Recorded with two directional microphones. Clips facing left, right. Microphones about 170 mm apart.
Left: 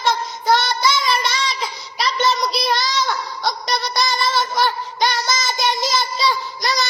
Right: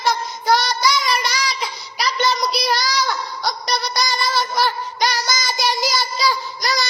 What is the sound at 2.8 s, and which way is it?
Child singing, 20° left (ahead or behind).